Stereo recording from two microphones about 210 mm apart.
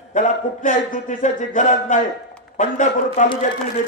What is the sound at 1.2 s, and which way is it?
Speech, 35° left (ahead or behind).